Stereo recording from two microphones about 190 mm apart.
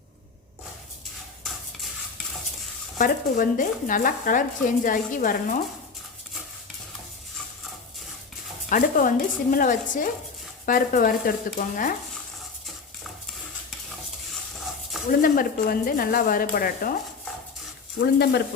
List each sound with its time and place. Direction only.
3.0 s speech: 45° left (ahead or behind)
8.7 s speech: 45° left (ahead or behind)
15.2 s speech: 50° left (ahead or behind)
18.0 s speech: 60° left (ahead or behind)